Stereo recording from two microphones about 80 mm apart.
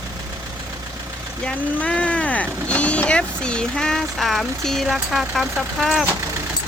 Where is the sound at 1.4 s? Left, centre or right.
Centre.